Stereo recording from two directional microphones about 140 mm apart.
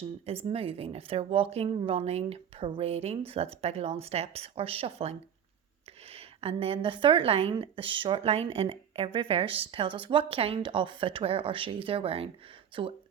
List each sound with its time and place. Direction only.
0.3 s a woman's voice: 45° right (ahead or behind)